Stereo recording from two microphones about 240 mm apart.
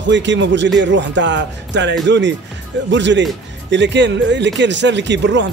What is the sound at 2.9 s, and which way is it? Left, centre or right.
Speech, right.